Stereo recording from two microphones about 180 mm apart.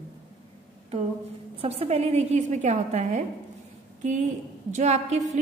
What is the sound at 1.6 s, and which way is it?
Music, 35° right (ahead or behind).